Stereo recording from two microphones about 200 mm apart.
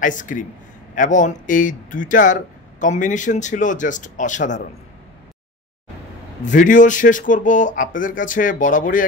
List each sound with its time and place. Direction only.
0.0 s speech: 40° left (ahead or behind)
6.4 s speech: 40° left (ahead or behind)